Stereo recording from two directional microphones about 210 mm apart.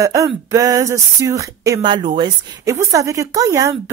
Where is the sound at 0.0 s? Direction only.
15° right (ahead or behind).